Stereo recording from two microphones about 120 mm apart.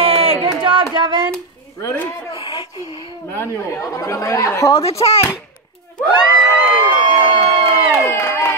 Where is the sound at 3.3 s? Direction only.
20° left (ahead or behind).